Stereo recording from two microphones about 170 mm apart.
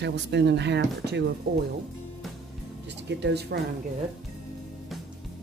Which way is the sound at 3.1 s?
85° right.